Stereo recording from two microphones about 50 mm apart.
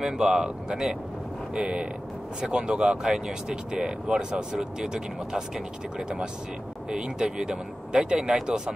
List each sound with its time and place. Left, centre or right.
0.0 s speech: centre